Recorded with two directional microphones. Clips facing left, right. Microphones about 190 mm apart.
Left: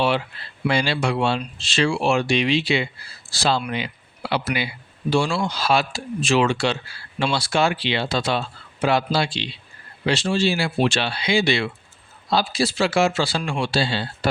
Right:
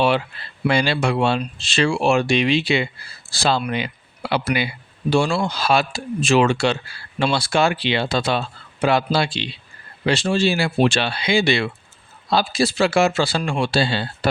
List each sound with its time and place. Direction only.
0.7 s speech: 55° right (ahead or behind)